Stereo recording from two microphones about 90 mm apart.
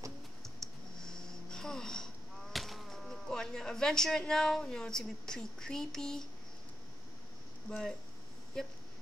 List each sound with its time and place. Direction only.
0.4 s a sound: 5° left (ahead or behind)
2.5 s speech: centre (ahead or behind)
7.7 s speech: 20° left (ahead or behind)